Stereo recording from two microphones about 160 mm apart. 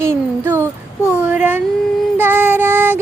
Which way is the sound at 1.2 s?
10° right (ahead or behind).